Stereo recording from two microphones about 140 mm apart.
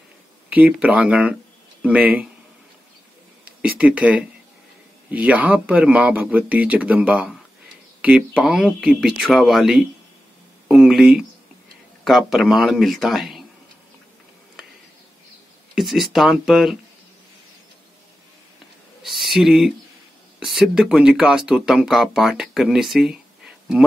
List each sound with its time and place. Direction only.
0.5 s speech: 10° right (ahead or behind)
3.6 s speech: 10° right (ahead or behind)
15.7 s speech: centre (ahead or behind)
19.0 s speech: centre (ahead or behind)